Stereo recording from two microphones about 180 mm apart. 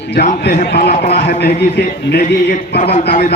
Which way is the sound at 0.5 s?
70° left (ahead or behind).